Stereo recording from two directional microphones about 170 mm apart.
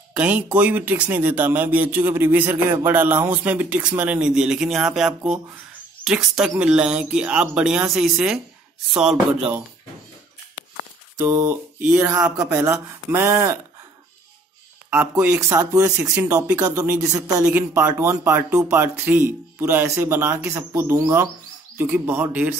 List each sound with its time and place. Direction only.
0.1 s speech: 5° right (ahead or behind)
11.1 s speech: 15° right (ahead or behind)
14.9 s speech: 10° right (ahead or behind)